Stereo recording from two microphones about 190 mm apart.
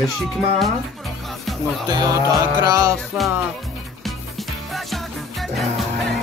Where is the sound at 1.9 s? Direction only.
20° right (ahead or behind).